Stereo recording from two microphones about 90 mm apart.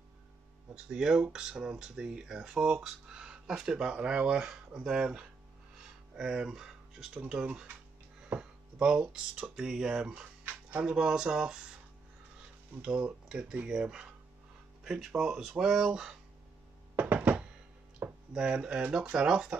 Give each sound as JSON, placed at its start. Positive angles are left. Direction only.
{"t": 0.7, "sound": "speech", "side_deg": -10}
{"t": 12.8, "sound": "speech", "side_deg": -10}
{"t": 16.9, "sound": "a sound", "side_deg": -20}
{"t": 17.9, "sound": "speech", "side_deg": -10}